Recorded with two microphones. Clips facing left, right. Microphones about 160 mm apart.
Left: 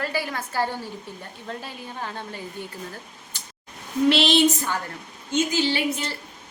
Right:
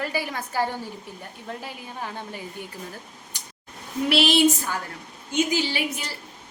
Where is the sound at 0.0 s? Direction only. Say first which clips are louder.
Left 1 dB; 15° right (ahead or behind).